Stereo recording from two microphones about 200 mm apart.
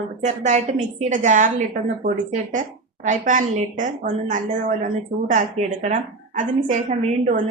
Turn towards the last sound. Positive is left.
turn(degrees=-40)  # may be behind; listen again after turning